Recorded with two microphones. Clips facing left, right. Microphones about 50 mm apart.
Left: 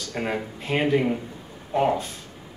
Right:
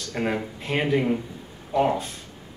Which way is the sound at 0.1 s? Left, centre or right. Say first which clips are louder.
Right 2 dB; centre.